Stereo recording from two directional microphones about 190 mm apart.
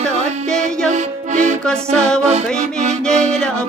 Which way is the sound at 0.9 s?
40° right (ahead or behind).